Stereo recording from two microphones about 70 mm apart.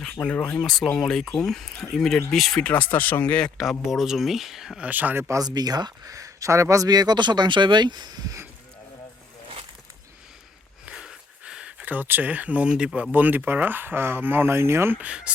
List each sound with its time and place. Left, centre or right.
0.1 s speech: left
0.9 s speech: centre
2.6 s speech: left
3.6 s speech: centre
4.8 s speech: right
5.4 s speech: right
6.1 s speech: right
6.8 s speech: right
10.8 s speech: centre; by 14.9 s right
14.9 s speech: centre